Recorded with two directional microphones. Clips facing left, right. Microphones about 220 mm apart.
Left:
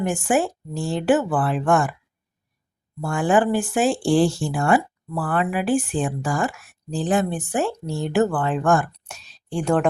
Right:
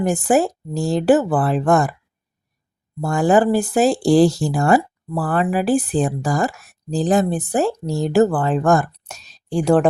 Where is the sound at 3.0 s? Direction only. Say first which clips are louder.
Right 4 dB; 40° right (ahead or behind).